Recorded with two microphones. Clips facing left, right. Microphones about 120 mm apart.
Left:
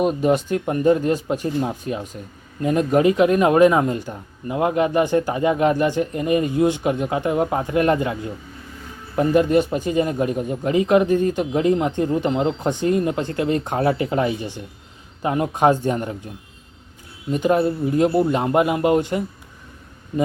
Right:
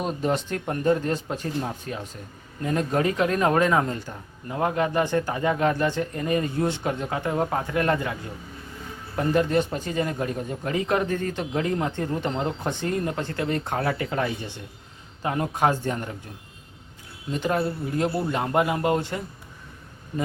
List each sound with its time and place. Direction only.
0.0 s speech: 15° left (ahead or behind)
9.1 s speech: 15° left (ahead or behind)
17.3 s speech: 15° left (ahead or behind)